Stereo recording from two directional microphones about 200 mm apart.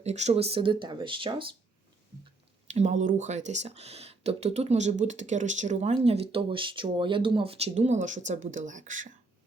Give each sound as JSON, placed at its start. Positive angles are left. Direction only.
{"t": 0.0, "sound": "speech", "side_deg": -35}
{"t": 2.6, "sound": "speech", "side_deg": -35}